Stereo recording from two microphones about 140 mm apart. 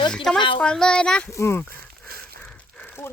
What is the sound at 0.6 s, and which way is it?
Speech, 5° left (ahead or behind).